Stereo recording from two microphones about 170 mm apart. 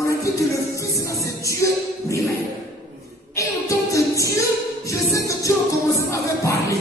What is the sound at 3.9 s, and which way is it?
Music, 20° left (ahead or behind).